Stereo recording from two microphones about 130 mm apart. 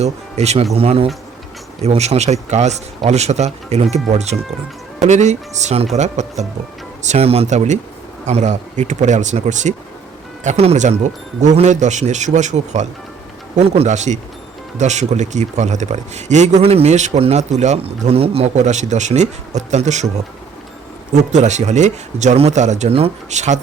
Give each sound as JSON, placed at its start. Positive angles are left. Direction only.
{"t": 0.0, "sound": "a man's voice", "side_deg": -55}
{"t": 21.3, "sound": "a man's voice", "side_deg": -65}
{"t": 22.9, "sound": "a man's voice", "side_deg": -50}